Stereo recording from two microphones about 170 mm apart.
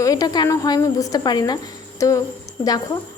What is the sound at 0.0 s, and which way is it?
A woman's voice, 20° left (ahead or behind).